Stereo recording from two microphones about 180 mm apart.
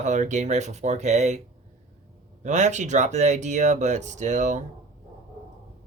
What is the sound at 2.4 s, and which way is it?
Speech, 40° right (ahead or behind).